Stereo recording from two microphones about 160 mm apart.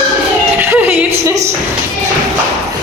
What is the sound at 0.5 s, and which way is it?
Music, 15° right (ahead or behind).